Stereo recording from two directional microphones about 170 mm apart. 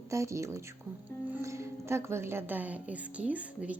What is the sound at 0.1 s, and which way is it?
Speech, 15° right (ahead or behind).